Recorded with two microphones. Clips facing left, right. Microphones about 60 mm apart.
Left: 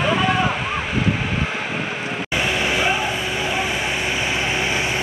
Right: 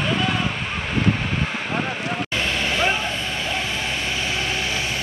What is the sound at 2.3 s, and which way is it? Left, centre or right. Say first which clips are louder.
Vehicle: left 4 dB; centre.